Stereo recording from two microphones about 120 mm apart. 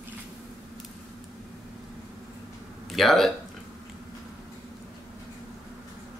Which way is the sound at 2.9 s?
Centre (ahead or behind).